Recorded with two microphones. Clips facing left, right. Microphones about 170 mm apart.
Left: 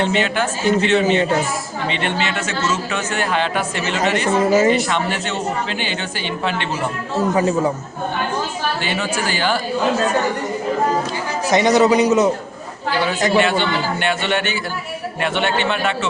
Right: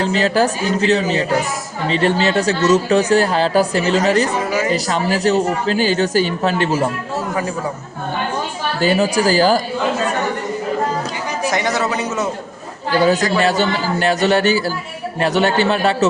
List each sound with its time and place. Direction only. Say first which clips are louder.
0.0 s speech: right 3 dB; 35° right (ahead or behind)
8.8 s speech: right 7 dB; 40° right (ahead or behind)
11.5 s a man's voice: left 9 dB; 20° left (ahead or behind)
13.4 s speech: right 2 dB; 40° right (ahead or behind)